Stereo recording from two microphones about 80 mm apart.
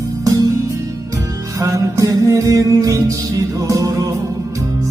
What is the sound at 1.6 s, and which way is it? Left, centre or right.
Music, right.